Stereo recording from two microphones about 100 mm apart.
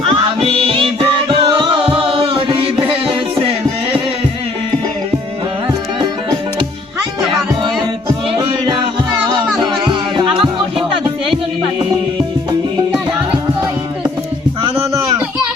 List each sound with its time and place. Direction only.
0.4 s music: 65° right (ahead or behind)
8.4 s music: 55° right (ahead or behind)
9.8 s music: 50° right (ahead or behind)